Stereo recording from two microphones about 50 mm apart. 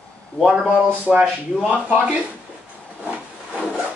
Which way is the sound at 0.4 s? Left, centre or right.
Centre.